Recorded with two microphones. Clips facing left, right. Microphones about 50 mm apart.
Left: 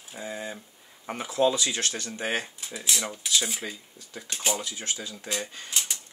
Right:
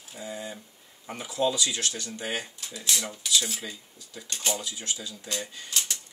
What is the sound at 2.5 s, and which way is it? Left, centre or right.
Speech, centre.